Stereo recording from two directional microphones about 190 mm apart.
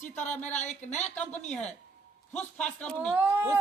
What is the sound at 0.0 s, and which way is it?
Speech, 40° left (ahead or behind).